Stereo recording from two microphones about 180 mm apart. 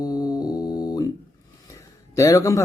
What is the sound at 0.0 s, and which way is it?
Music, 20° left (ahead or behind).